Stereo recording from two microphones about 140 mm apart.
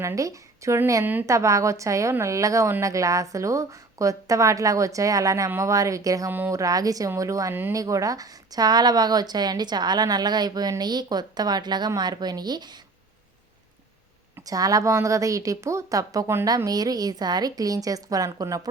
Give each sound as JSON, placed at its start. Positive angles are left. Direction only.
{"t": 0.0, "sound": "a woman's voice", "side_deg": -20}
{"t": 14.3, "sound": "a woman's voice", "side_deg": -25}